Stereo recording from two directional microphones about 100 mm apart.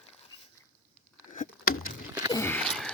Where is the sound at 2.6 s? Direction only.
5° left (ahead or behind).